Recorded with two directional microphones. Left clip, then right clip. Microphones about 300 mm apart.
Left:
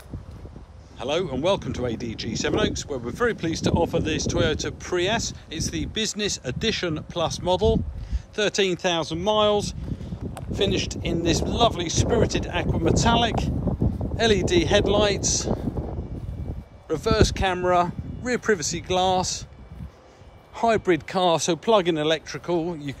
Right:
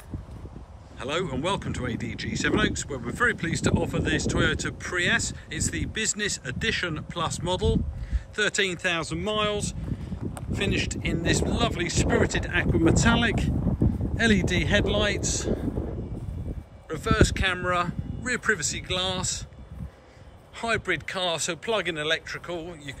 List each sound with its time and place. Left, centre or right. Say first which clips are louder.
0.9 s speech: left 3 dB; centre
16.8 s speech: left 3 dB; centre
20.5 s speech: left 6 dB; centre